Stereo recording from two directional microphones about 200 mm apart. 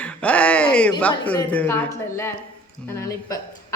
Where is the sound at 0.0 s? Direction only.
5° left (ahead or behind).